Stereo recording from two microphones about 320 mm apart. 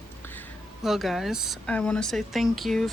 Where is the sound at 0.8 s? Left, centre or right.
Centre.